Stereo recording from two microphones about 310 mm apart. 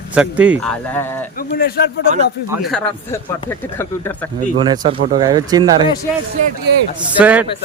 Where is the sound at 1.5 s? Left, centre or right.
Left.